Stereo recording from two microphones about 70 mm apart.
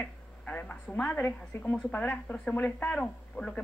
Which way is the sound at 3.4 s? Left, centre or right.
Centre.